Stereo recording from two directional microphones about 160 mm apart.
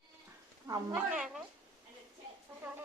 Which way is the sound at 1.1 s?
5° right (ahead or behind).